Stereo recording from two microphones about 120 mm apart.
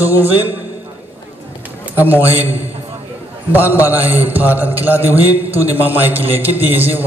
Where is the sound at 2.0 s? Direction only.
15° right (ahead or behind).